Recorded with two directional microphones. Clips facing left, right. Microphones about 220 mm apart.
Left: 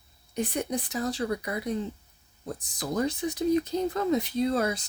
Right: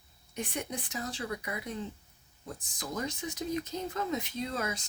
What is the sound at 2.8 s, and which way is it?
Speech, 35° left (ahead or behind).